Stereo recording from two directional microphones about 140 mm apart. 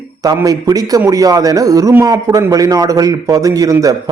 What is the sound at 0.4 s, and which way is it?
A man's voice, 25° right (ahead or behind).